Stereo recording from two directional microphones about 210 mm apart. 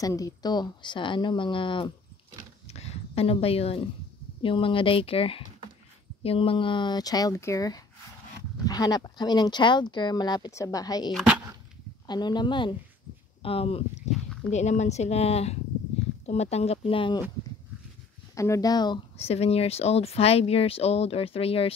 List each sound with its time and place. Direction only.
0.0 s speech: 15° left (ahead or behind)
2.7 s a sound: 30° left (ahead or behind)
4.4 s speech: 25° left (ahead or behind)
11.1 s speech: 5° right (ahead or behind)
12.1 s speech: 20° left (ahead or behind)
14.1 s a sound: centre (ahead or behind)
14.5 s speech: 35° left (ahead or behind)
18.3 s speech: 15° left (ahead or behind)